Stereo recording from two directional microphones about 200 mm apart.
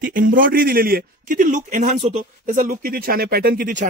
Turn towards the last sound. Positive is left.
turn(degrees=-40)  # may be behind; listen again after turning